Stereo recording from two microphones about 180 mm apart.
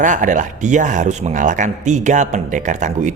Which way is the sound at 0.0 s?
45° right (ahead or behind).